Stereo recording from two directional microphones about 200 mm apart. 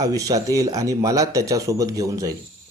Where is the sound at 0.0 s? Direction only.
15° right (ahead or behind).